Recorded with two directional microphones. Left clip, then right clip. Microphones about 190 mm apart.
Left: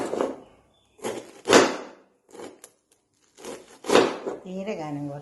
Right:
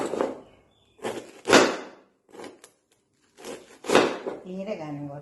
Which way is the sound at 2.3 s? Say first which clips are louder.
Left 1 dB; 10° left (ahead or behind).